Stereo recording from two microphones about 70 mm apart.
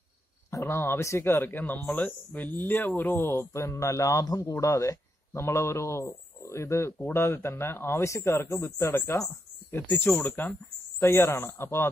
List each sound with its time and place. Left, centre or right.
0.5 s a man's voice: left
11.0 s a man's voice: left